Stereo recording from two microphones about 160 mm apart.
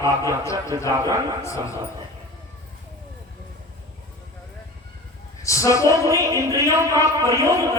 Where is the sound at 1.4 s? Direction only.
20° left (ahead or behind).